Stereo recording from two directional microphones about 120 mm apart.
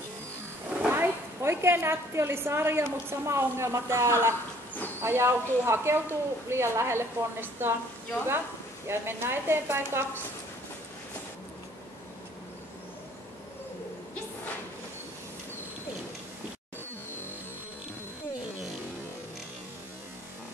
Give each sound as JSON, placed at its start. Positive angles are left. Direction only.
{"t": 0.8, "sound": "a woman's voice", "side_deg": -15}
{"t": 8.8, "sound": "a woman's voice", "side_deg": -20}